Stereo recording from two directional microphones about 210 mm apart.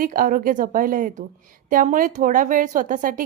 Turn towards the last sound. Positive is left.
turn(degrees=-40)  # may be behind; listen again after turning